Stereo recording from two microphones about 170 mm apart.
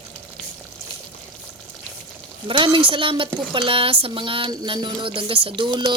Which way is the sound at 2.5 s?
30° right (ahead or behind).